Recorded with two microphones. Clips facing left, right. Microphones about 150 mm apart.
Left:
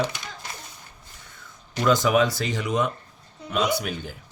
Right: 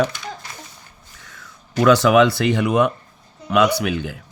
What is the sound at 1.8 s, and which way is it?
Speech, 80° right.